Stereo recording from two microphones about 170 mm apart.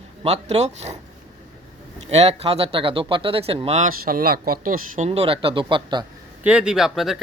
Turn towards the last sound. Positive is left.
turn(degrees=0)  # may be behind; listen again after turning